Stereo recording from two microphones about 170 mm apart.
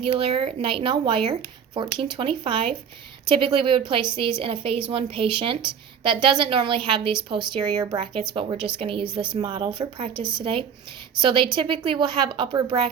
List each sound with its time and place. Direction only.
0.2 s a woman's voice: 30° right (ahead or behind)